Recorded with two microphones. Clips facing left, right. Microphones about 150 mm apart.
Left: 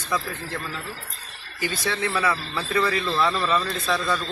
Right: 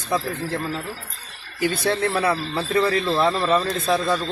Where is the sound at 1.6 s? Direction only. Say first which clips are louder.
Right 5 dB; 55° right (ahead or behind).